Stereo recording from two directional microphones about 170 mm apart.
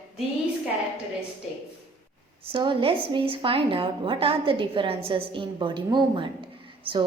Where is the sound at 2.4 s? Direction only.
30° right (ahead or behind).